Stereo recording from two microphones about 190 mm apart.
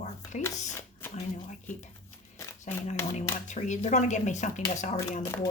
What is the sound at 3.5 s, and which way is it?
Speech, 40° left (ahead or behind).